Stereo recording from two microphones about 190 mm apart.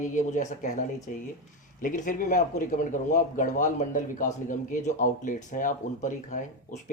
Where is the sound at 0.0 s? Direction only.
40° left (ahead or behind).